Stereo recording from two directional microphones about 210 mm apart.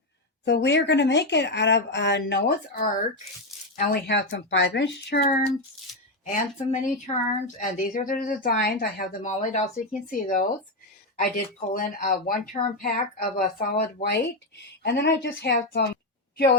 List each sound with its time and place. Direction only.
0.4 s speech: 55° left (ahead or behind); by 14.2 s 40° left (ahead or behind)
14.5 s speech: 50° left (ahead or behind)